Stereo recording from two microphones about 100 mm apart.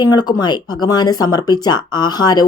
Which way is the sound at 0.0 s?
45° left (ahead or behind).